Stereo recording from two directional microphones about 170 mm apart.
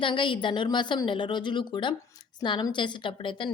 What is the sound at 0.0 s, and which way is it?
A woman's voice, 30° left (ahead or behind).